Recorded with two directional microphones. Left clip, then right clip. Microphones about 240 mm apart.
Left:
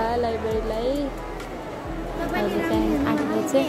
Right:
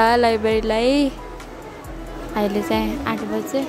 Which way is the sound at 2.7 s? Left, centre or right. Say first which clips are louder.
Even; right.